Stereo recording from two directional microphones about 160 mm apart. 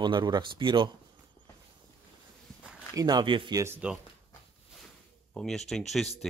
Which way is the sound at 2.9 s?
25° right (ahead or behind).